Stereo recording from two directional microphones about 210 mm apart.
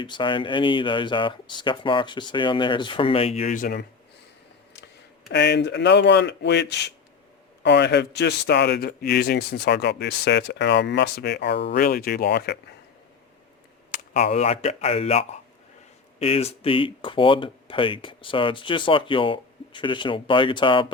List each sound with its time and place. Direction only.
0.0 s speech: 25° left (ahead or behind); by 3.8 s 45° left (ahead or behind)
5.3 s speech: 55° left (ahead or behind)
13.9 s speech: 30° left (ahead or behind)